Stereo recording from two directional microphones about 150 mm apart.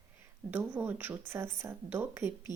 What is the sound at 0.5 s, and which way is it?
Speech, 10° right (ahead or behind).